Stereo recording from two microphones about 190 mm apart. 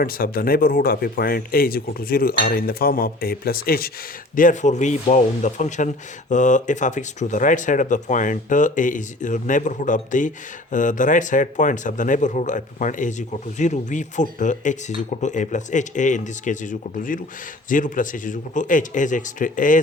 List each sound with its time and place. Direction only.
0.0 s speech: 50° left (ahead or behind)
4.4 s speech: 40° left (ahead or behind)